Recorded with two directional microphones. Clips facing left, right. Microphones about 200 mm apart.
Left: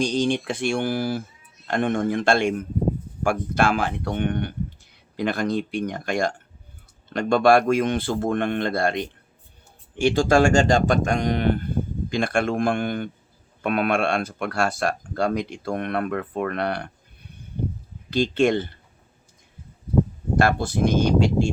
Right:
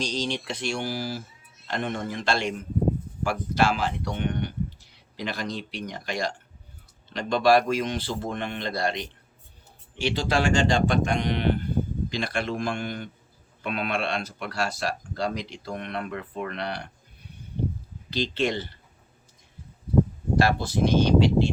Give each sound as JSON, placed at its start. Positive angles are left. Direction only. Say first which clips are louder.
{"t": 0.0, "sound": "speech", "louder": "left 7 dB", "side_deg": 55}
{"t": 18.1, "sound": "speech", "louder": "left 7 dB", "side_deg": 50}
{"t": 20.3, "sound": "speech", "louder": "left 2 dB", "side_deg": 55}